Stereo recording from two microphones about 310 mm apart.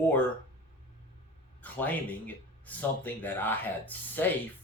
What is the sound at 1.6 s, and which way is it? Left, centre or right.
Speech, centre.